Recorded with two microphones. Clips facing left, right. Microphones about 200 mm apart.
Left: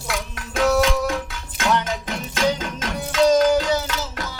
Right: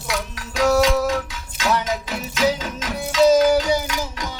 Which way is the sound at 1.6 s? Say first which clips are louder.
Even; 55° left (ahead or behind).